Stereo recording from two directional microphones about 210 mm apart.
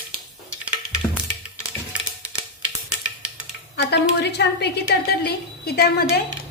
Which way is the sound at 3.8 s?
55° left (ahead or behind).